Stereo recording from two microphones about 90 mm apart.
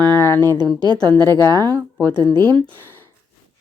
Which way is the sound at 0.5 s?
55° right (ahead or behind).